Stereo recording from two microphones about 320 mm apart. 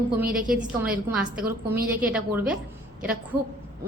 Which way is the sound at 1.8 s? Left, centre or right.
Centre.